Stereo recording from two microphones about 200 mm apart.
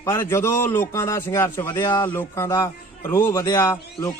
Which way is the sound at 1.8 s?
20° left (ahead or behind).